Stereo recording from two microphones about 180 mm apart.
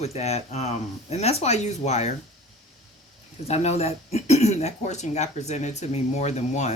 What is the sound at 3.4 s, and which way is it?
Speech, 35° left (ahead or behind).